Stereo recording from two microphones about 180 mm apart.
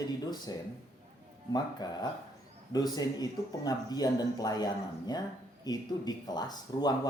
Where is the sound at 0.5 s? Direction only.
20° left (ahead or behind).